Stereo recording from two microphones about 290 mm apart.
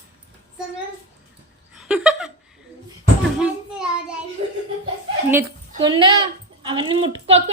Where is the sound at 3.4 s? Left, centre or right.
Centre.